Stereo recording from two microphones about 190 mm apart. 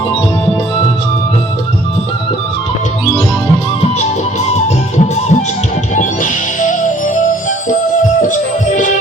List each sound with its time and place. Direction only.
3.9 s music: 35° left (ahead or behind)